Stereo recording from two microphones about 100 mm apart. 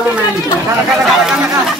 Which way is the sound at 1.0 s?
5° right (ahead or behind).